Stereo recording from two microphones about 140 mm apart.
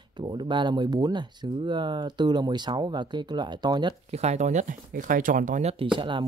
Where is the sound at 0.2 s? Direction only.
35° right (ahead or behind).